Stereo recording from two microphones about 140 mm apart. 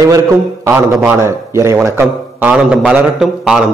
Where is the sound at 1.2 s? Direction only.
20° right (ahead or behind).